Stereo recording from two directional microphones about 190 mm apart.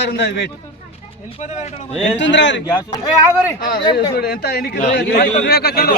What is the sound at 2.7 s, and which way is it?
Speech, 20° left (ahead or behind).